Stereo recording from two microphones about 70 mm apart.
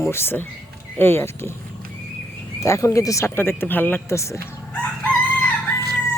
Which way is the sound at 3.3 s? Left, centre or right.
Left.